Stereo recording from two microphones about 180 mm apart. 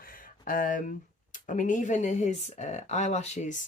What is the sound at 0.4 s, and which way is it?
Speech, 50° left (ahead or behind).